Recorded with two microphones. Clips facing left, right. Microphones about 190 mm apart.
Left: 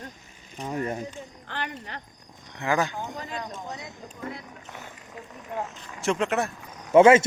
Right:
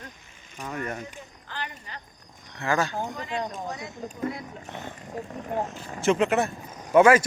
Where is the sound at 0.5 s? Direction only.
30° left (ahead or behind).